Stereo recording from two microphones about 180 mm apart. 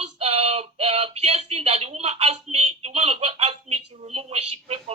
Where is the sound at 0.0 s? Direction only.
35° right (ahead or behind).